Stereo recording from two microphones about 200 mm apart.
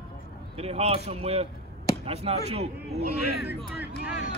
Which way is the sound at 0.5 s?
30° right (ahead or behind).